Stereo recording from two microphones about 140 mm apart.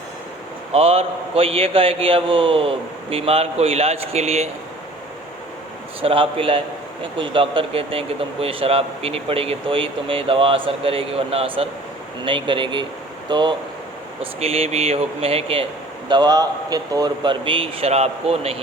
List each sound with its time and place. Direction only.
0.7 s a man's voice: 45° right (ahead or behind)
6.0 s speech: 40° right (ahead or behind)
14.2 s a man's voice: 45° right (ahead or behind)
16.0 s speech: 30° right (ahead or behind); by 18.5 s 50° right (ahead or behind)